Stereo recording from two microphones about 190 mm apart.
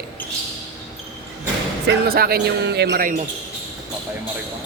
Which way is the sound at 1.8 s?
50° right (ahead or behind).